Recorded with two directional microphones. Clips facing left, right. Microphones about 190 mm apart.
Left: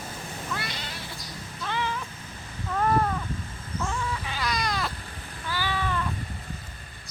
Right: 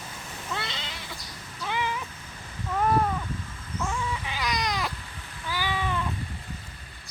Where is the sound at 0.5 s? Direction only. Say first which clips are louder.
Right 2 dB; 25° right (ahead or behind).